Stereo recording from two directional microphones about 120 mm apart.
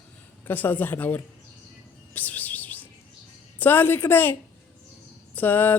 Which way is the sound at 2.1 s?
15° left (ahead or behind).